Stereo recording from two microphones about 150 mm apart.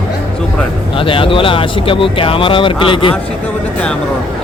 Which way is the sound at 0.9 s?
35° left (ahead or behind).